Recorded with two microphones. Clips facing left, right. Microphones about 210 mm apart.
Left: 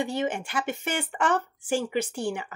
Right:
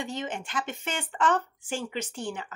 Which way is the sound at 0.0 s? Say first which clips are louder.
Left 6 dB; 10° left (ahead or behind).